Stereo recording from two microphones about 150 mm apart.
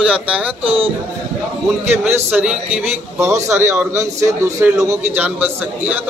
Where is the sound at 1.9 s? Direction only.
15° right (ahead or behind).